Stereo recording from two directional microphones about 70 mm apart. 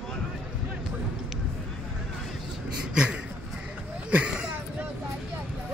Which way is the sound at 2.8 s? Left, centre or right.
Centre.